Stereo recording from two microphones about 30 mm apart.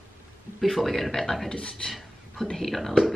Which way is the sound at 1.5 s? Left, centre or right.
Left.